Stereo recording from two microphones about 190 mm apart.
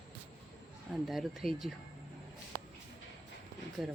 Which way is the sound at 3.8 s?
Centre (ahead or behind).